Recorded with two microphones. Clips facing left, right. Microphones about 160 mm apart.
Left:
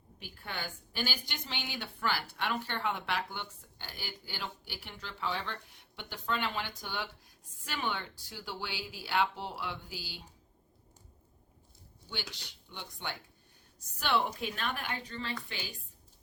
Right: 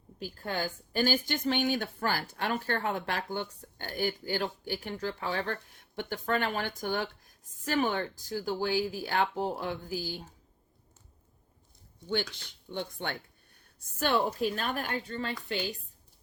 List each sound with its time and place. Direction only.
0.2 s a woman's voice: 40° right (ahead or behind)
12.0 s a woman's voice: 50° right (ahead or behind)